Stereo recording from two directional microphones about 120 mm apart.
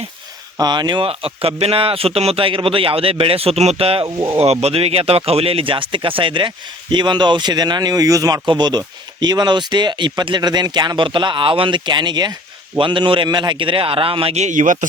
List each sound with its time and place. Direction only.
0.6 s speech: 40° right (ahead or behind)
1.0 s a man's voice: 50° right (ahead or behind)
4.0 s speech: 30° right (ahead or behind)
4.4 s a man's voice: 60° right (ahead or behind)
14.4 s a man's voice: 90° right